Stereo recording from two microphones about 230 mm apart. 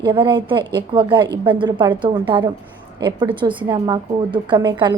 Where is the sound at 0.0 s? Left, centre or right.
Centre.